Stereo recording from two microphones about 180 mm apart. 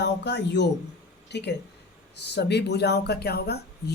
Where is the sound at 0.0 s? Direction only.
70° left (ahead or behind).